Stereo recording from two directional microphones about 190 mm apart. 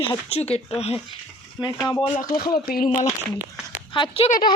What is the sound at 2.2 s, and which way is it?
Speech, 50° left (ahead or behind).